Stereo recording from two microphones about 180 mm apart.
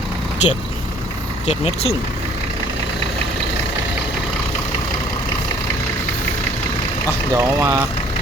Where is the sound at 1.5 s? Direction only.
35° left (ahead or behind).